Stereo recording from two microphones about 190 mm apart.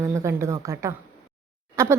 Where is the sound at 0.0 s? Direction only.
15° right (ahead or behind).